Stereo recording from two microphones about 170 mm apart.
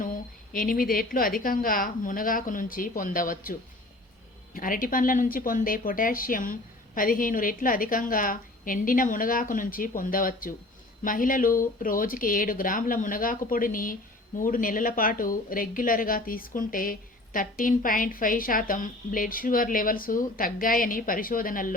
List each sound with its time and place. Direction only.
0.5 s a woman's voice: 60° left (ahead or behind)
4.5 s a woman's voice: 55° left (ahead or behind)